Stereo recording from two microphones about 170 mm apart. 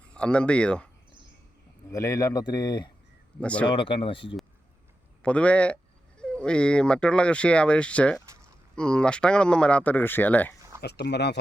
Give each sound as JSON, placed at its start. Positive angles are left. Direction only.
{"t": 0.0, "sound": "speech", "side_deg": 5}
{"t": 1.9, "sound": "a man's voice", "side_deg": 20}
{"t": 3.4, "sound": "speech", "side_deg": 5}
{"t": 3.7, "sound": "speech", "side_deg": 30}
{"t": 5.2, "sound": "speech", "side_deg": 5}
{"t": 10.8, "sound": "speech", "side_deg": 75}